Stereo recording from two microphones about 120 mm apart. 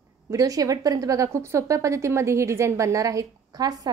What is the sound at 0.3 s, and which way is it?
A woman's voice, 30° right (ahead or behind).